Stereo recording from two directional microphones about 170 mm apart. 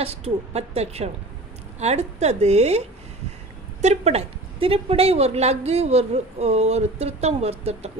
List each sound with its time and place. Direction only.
0.0 s a woman's voice: 35° right (ahead or behind)
3.8 s a woman's voice: 40° right (ahead or behind)